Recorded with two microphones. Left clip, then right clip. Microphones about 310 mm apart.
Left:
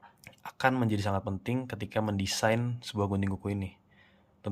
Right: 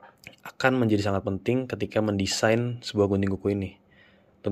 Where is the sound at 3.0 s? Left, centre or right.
Centre.